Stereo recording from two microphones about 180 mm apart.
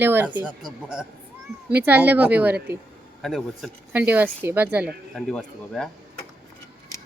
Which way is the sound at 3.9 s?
10° right (ahead or behind).